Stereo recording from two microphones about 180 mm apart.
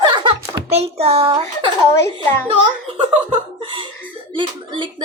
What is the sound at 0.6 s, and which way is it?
Speech, 35° right (ahead or behind).